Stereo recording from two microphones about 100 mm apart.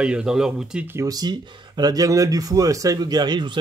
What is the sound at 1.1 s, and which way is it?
Speech, 45° right (ahead or behind).